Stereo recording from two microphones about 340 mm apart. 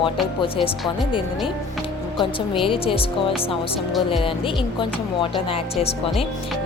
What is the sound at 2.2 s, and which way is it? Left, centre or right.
Speech, centre.